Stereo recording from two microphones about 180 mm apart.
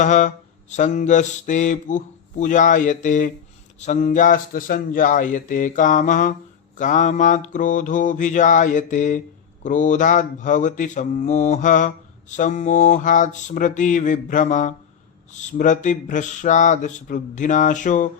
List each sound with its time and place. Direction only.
0.0 s mantra: 45° left (ahead or behind)